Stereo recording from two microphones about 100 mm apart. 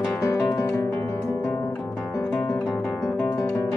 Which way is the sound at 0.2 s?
30° left (ahead or behind).